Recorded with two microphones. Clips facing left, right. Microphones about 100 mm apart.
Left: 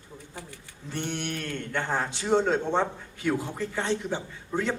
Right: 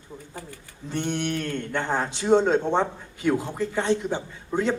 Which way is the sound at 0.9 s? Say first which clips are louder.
Right 5 dB; 20° right (ahead or behind).